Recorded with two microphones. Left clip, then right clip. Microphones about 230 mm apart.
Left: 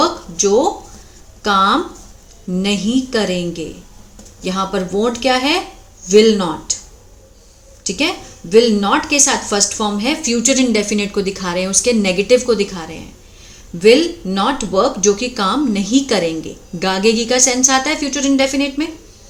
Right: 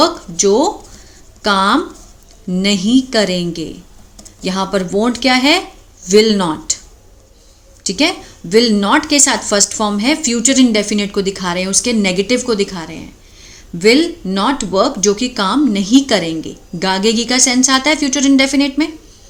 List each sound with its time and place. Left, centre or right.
0.0 s a sound: right
1.4 s speech: right
7.9 s speech: right